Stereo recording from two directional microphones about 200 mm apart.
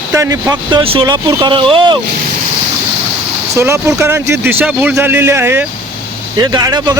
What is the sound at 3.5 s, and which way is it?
Speech, 15° right (ahead or behind).